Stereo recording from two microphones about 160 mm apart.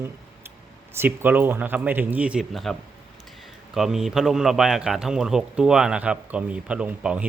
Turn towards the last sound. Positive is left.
turn(degrees=-10)  # may be behind; listen again after turning